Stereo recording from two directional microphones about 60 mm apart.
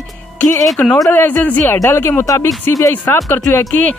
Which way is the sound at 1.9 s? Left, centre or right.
Left.